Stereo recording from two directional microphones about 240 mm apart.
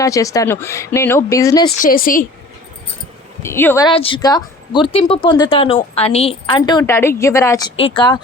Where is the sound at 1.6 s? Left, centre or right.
Left.